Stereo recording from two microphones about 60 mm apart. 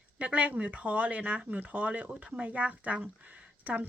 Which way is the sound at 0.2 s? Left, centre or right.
Right.